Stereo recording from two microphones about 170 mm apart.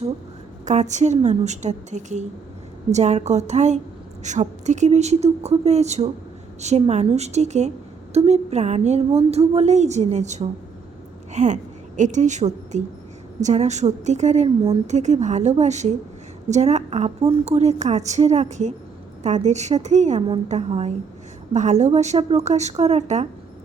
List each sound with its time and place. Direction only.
0.6 s a woman's voice: 45° right (ahead or behind)